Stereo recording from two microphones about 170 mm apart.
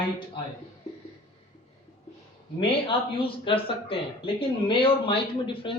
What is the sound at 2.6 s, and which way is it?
A man's voice, 30° left (ahead or behind).